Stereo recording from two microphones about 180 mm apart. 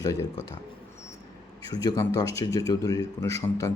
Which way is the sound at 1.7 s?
20° left (ahead or behind).